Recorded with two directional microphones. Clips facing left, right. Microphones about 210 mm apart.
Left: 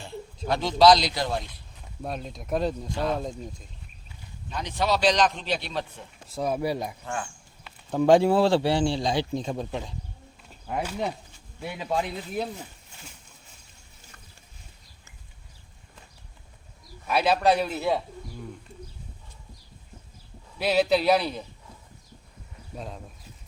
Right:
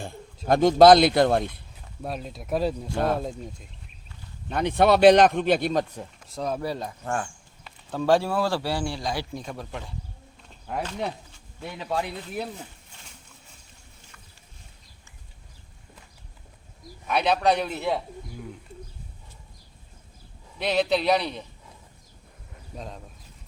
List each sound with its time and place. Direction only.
0.4 s speech: 50° right (ahead or behind)
2.0 s a man's voice: centre (ahead or behind)
4.4 s speech: 55° right (ahead or behind)
6.2 s speech: 5° left (ahead or behind)
7.0 s speech: 50° right (ahead or behind)
7.9 s speech: 15° left (ahead or behind)
10.5 s a man's voice: 5° left (ahead or behind)
17.1 s a man's voice: 5° left (ahead or behind)
20.6 s a man's voice: 5° left (ahead or behind)
22.7 s speech: 5° left (ahead or behind)